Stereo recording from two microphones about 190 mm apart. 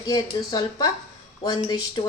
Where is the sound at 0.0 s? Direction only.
20° left (ahead or behind).